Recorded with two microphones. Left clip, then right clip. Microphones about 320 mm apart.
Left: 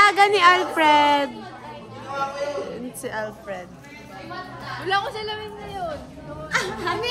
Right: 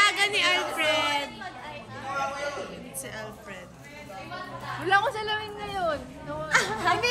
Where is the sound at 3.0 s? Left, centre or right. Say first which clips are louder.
Left 11 dB; left.